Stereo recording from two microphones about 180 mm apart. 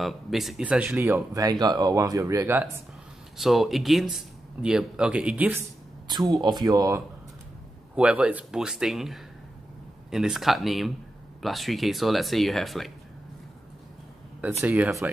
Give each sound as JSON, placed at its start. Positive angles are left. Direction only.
{"t": 0.0, "sound": "speech", "side_deg": 0}
{"t": 3.3, "sound": "speech", "side_deg": 0}
{"t": 6.0, "sound": "a man's voice", "side_deg": -25}
{"t": 7.9, "sound": "speech", "side_deg": -5}
{"t": 14.6, "sound": "speech", "side_deg": -10}